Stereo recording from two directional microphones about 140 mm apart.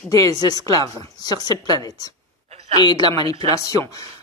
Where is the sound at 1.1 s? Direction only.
30° left (ahead or behind).